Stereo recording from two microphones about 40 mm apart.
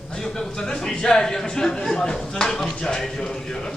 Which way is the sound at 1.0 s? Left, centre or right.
Centre.